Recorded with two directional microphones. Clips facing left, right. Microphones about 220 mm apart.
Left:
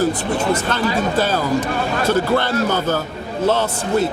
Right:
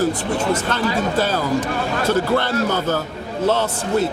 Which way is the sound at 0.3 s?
25° left (ahead or behind).